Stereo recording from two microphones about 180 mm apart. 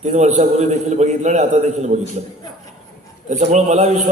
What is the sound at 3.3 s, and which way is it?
Speech, 40° right (ahead or behind).